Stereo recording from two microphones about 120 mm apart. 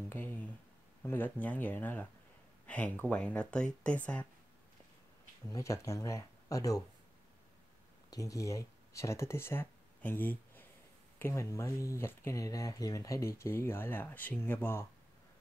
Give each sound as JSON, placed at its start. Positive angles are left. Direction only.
{"t": 0.1, "sound": "a sound", "side_deg": 15}
{"t": 1.0, "sound": "speech", "side_deg": 15}
{"t": 5.5, "sound": "speech", "side_deg": 25}
{"t": 8.1, "sound": "speech", "side_deg": 30}